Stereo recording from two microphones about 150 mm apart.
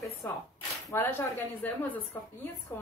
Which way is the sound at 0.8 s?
15° left (ahead or behind).